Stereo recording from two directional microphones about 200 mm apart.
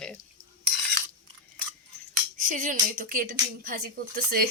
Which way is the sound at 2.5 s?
40° right (ahead or behind).